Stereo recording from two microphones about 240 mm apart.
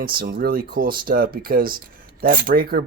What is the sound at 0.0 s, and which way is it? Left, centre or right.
Speech, right.